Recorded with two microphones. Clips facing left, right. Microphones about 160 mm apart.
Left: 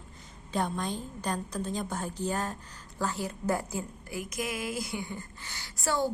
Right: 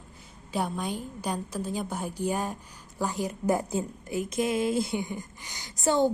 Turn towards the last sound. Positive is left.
turn(degrees=-20)  # may be behind; listen again after turning